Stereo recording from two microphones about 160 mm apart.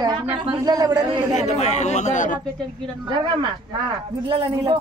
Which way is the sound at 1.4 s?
45° left (ahead or behind).